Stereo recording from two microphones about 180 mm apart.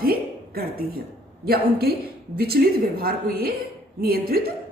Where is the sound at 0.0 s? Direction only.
55° right (ahead or behind).